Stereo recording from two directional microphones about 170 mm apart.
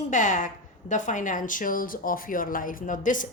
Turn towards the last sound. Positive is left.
turn(degrees=50)  # may be behind; listen again after turning